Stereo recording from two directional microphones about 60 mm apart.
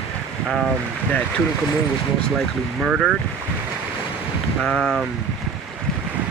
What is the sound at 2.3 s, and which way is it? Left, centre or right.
Speech, centre.